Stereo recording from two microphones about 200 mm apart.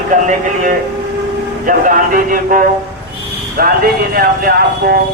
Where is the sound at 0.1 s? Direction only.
40° right (ahead or behind).